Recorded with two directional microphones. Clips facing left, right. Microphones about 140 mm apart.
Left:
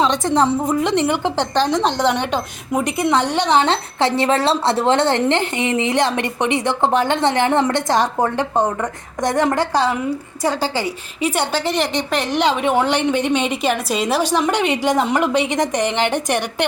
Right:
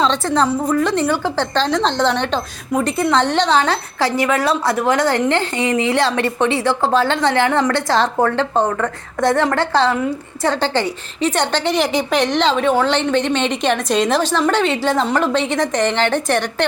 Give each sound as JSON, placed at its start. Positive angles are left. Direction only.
{"t": 0.0, "sound": "a woman's voice", "side_deg": 15}
{"t": 3.6, "sound": "a woman's voice", "side_deg": 25}